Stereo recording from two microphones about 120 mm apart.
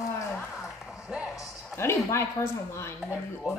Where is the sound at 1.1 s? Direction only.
10° right (ahead or behind).